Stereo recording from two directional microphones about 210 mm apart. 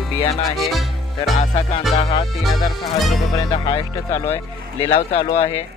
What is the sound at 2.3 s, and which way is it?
Speech, centre (ahead or behind).